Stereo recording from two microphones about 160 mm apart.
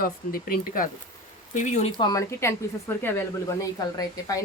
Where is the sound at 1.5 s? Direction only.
50° left (ahead or behind).